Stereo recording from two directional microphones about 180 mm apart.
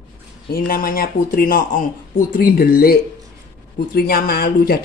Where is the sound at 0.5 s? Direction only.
55° left (ahead or behind).